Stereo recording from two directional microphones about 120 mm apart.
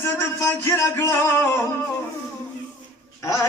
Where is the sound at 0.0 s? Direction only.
20° left (ahead or behind).